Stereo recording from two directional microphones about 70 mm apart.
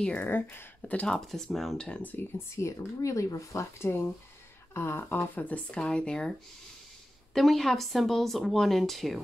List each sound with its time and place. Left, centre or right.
0.2 s speech: left
1.0 s speech: centre
1.8 s speech: centre
2.3 s speech: left; by 6.3 s centre
7.3 s speech: centre